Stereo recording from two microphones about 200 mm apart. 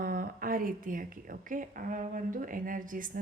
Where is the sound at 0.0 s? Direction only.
45° right (ahead or behind).